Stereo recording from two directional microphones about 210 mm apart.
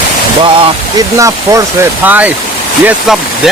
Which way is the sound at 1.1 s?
15° right (ahead or behind).